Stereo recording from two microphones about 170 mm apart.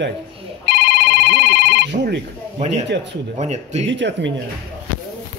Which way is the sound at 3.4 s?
40° right (ahead or behind).